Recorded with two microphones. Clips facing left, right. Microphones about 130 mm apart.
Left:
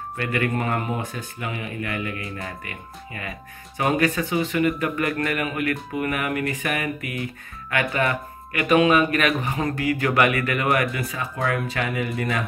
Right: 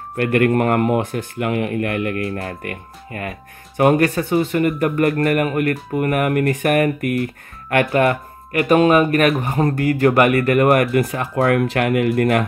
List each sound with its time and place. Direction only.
0.2 s speech: 60° right (ahead or behind)
8.5 s speech: 40° right (ahead or behind); by 12.4 s 65° right (ahead or behind)